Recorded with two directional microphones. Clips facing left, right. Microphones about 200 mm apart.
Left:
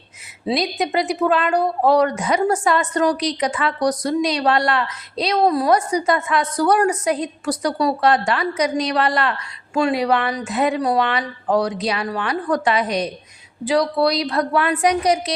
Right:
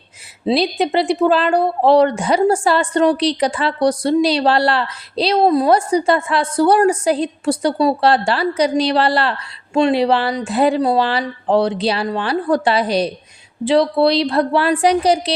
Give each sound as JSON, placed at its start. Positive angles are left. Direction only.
{"t": 0.4, "sound": "speech", "side_deg": -30}